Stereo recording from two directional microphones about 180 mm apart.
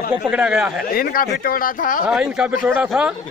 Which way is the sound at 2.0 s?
5° right (ahead or behind).